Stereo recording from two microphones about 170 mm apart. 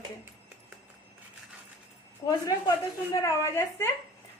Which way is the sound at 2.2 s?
20° left (ahead or behind).